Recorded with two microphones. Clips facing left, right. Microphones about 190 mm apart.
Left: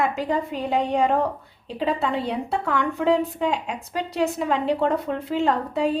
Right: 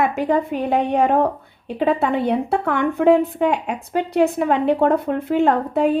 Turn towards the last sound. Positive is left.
turn(degrees=-55)  # may be behind; listen again after turning